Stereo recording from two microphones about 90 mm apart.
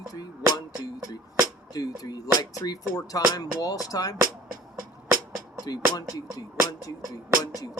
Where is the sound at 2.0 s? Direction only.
45° left (ahead or behind).